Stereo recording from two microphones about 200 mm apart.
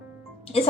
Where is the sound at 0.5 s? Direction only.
30° left (ahead or behind).